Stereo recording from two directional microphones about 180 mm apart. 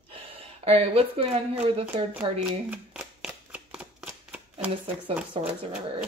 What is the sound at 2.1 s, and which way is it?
Shuffling cards, 10° right (ahead or behind).